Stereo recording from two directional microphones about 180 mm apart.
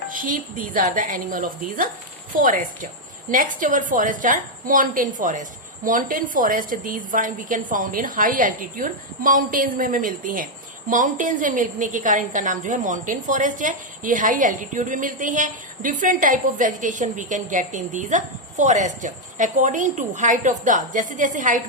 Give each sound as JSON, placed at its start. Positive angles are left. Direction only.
{"t": 0.1, "sound": "a woman's voice", "side_deg": -50}